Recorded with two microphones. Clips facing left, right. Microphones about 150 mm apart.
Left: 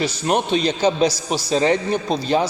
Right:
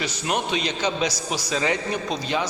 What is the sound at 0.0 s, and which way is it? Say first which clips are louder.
A man's voice: left 6 dB; 30° left (ahead or behind).